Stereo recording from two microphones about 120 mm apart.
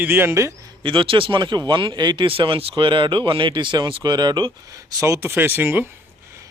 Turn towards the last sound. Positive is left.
turn(degrees=-15)  # may be behind; listen again after turning